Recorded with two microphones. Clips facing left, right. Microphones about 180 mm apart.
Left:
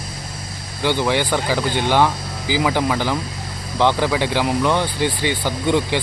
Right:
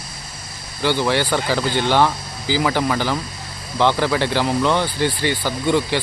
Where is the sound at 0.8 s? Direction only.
15° left (ahead or behind).